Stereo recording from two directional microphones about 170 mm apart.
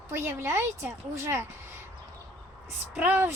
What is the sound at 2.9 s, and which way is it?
Speech, 10° right (ahead or behind).